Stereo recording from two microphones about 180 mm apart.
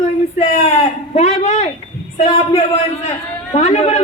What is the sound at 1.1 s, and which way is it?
Speech, 35° left (ahead or behind).